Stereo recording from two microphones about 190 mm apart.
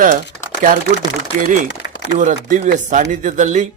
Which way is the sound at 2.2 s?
40° right (ahead or behind).